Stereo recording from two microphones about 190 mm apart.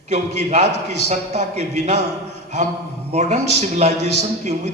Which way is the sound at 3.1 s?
40° right (ahead or behind).